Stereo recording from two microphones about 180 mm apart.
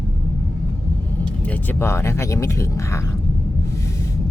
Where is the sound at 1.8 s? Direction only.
15° left (ahead or behind).